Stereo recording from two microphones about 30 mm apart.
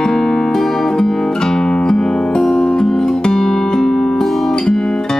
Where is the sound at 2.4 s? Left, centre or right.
Centre.